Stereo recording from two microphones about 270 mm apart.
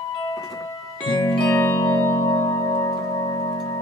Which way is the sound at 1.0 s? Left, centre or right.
Centre.